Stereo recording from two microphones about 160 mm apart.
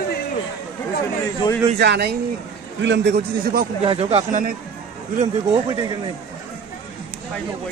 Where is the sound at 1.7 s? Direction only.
90° right; by 3.7 s 75° right (ahead or behind).